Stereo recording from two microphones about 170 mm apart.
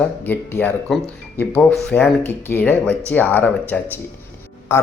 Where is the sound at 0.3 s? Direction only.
10° left (ahead or behind).